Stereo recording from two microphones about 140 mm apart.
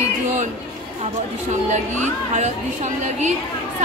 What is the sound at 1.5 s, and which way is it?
A woman's voice, 60° right (ahead or behind).